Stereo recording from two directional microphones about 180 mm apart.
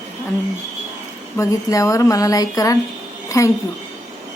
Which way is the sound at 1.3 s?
15° left (ahead or behind).